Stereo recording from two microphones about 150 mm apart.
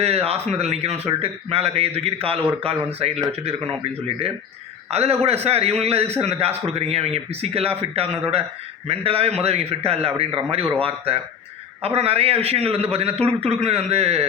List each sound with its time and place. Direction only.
0.0 s a man's voice: 40° right (ahead or behind)
4.9 s a man's voice: 45° right (ahead or behind)